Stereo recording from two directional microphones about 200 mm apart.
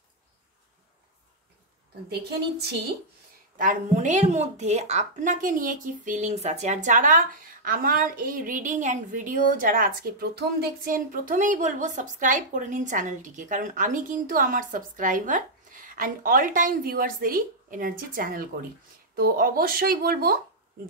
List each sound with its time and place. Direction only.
3.5 s a woman's voice: 40° right (ahead or behind)